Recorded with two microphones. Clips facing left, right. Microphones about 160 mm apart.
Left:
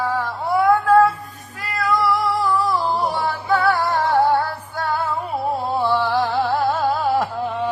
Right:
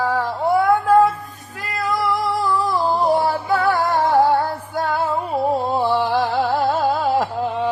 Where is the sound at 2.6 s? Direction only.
50° right (ahead or behind).